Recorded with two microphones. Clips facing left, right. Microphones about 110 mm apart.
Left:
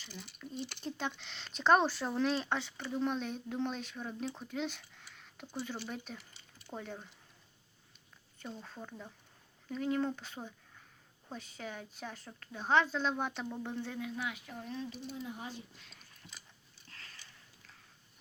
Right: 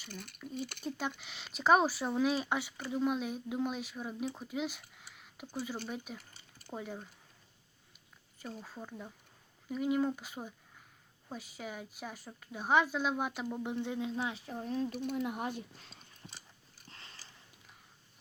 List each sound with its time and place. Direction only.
0.1 s speech: 50° right (ahead or behind)
0.9 s speech: 5° right (ahead or behind)
8.4 s speech: 5° right (ahead or behind); by 15.8 s 55° right (ahead or behind)
15.8 s a sound: 30° right (ahead or behind)